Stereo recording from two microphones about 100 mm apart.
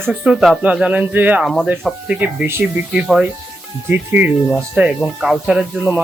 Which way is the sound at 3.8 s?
20° right (ahead or behind).